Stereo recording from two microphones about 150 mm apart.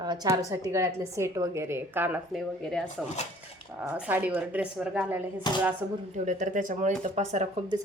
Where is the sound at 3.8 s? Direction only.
10° right (ahead or behind).